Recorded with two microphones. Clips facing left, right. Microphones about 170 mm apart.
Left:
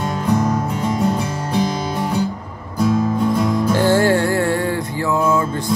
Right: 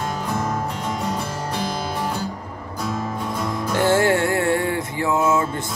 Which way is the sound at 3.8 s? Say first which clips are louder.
Left 1 dB; 25° right (ahead or behind).